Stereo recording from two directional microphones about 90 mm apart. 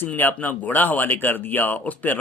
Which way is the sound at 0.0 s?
20° left (ahead or behind).